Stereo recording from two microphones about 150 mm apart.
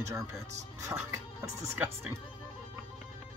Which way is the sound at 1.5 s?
15° right (ahead or behind).